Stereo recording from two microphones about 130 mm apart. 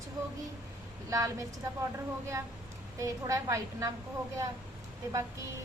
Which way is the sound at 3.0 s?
25° right (ahead or behind).